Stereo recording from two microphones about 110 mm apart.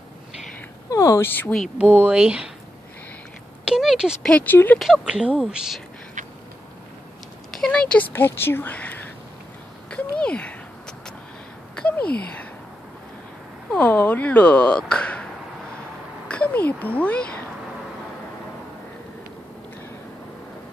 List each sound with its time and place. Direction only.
0.8 s speech: 30° left (ahead or behind)
1.8 s speech: 15° right (ahead or behind)
3.6 s a sound: 5° right (ahead or behind)
4.2 s speech: 10° left (ahead or behind)
4.7 s speech: centre (ahead or behind)
7.5 s a sound: 5° left (ahead or behind)
8.1 s speech: 20° left (ahead or behind)
9.8 s a sound: 10° left (ahead or behind)
13.7 s speech: 15° left (ahead or behind)
16.3 s speech: 10° left (ahead or behind)